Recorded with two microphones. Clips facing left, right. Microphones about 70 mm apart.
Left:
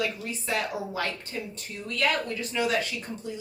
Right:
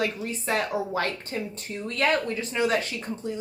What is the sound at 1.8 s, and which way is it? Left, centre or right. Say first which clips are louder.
Speech: right 3 dB; right.